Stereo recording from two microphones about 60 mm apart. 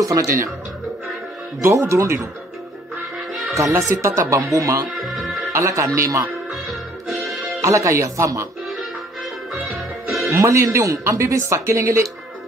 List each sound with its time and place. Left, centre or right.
0.0 s speech: right
1.7 s speech: right
3.5 s speech: right
6.5 s music: centre
7.6 s speech: right
10.3 s speech: right